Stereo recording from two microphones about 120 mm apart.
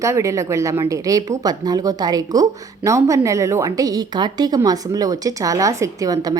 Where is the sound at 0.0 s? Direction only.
25° right (ahead or behind).